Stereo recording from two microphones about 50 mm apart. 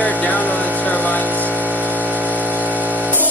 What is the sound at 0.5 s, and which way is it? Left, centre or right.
Speech, right.